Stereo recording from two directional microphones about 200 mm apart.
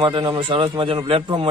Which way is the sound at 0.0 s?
25° right (ahead or behind).